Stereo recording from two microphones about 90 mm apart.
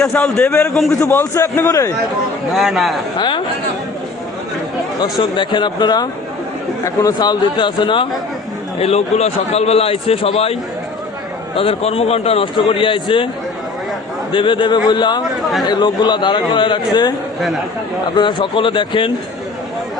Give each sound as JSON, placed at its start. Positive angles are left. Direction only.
{"t": 0.1, "sound": "a man's voice", "side_deg": 10}
{"t": 1.2, "sound": "a man's voice", "side_deg": 35}
{"t": 2.5, "sound": "speech", "side_deg": 0}
{"t": 3.2, "sound": "a man's voice", "side_deg": 65}
{"t": 5.2, "sound": "a man's voice", "side_deg": 60}
{"t": 8.8, "sound": "a man's voice", "side_deg": 90}
{"t": 14.3, "sound": "a man's voice", "side_deg": 65}
{"t": 18.2, "sound": "speech", "side_deg": 60}